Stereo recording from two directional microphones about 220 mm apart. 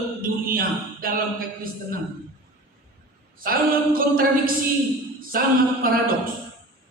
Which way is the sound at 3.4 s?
40° right (ahead or behind).